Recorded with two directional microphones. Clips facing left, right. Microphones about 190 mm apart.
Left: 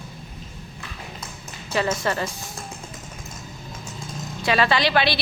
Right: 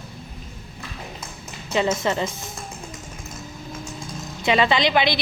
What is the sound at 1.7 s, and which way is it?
Speech, 20° right (ahead or behind).